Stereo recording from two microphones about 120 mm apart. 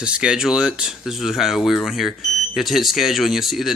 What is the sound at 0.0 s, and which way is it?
Speech, 10° right (ahead or behind).